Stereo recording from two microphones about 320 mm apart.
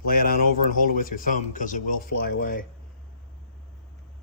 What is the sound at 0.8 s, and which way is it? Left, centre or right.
Speech, left.